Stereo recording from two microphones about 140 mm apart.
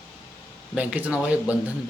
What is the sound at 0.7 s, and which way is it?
Speech, 10° right (ahead or behind).